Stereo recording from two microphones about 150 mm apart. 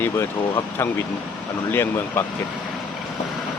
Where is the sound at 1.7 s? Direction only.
15° left (ahead or behind).